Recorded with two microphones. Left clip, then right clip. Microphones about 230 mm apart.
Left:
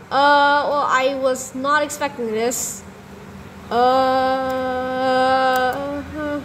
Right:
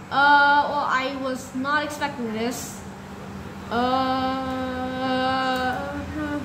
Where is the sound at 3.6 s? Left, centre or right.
Left.